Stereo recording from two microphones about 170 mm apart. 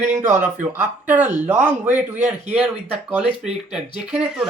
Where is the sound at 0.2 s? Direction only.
10° right (ahead or behind).